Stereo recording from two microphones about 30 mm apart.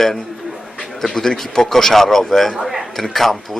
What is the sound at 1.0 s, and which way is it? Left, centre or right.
A man's voice, centre.